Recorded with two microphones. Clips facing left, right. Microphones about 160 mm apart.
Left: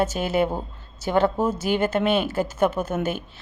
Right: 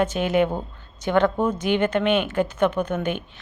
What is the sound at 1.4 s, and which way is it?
Speech, 5° left (ahead or behind).